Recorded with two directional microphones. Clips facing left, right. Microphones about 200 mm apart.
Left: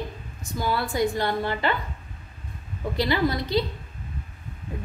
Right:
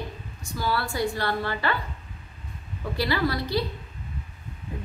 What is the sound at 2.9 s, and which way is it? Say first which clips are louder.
Speech: left 2 dB; 20° left (ahead or behind).